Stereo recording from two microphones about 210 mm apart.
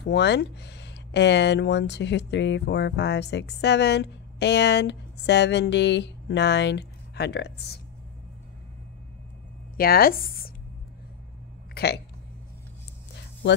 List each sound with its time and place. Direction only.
0.0 s speech: 55° left (ahead or behind)
9.8 s speech: 45° left (ahead or behind)
11.7 s a sound: 50° left (ahead or behind)